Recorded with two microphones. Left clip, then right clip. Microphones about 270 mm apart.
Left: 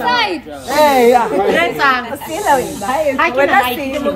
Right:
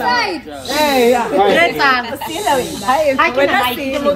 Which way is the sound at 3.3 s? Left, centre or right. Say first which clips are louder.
Left 2 dB; centre.